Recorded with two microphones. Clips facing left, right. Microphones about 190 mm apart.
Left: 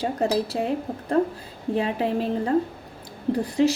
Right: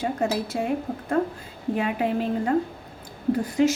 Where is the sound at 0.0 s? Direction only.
35° left (ahead or behind).